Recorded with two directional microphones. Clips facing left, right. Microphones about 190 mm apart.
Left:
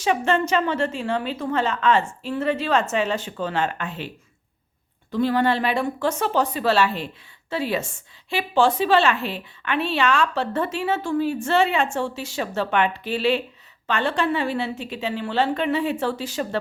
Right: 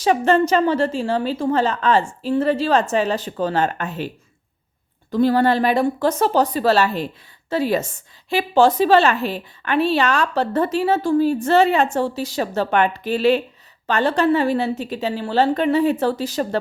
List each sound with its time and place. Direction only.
0.0 s a woman's voice: 35° right (ahead or behind)
5.1 s a woman's voice: 40° right (ahead or behind)